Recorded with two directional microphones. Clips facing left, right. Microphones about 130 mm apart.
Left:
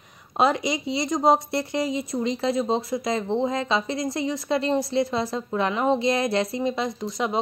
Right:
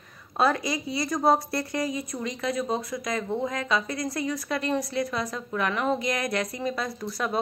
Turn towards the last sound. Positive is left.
turn(degrees=20)  # may be behind; listen again after turning